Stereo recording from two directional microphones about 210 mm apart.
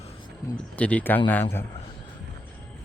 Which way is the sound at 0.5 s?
5° left (ahead or behind).